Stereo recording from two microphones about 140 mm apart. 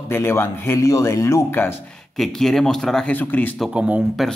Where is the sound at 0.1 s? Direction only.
20° left (ahead or behind).